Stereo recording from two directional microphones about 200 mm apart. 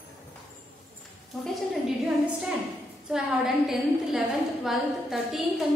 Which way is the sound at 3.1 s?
Centre (ahead or behind).